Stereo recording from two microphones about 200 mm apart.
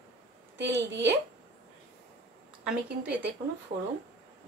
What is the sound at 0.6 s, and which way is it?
Speech, 60° right (ahead or behind).